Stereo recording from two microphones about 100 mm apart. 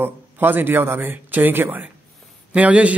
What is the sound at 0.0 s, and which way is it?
A man's voice, 20° right (ahead or behind).